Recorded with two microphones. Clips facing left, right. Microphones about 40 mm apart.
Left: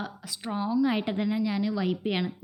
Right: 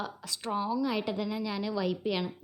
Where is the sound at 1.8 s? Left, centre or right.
Left.